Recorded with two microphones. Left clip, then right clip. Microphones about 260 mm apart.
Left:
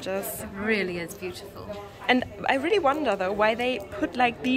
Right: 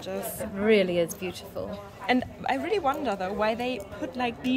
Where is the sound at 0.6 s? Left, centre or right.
Right.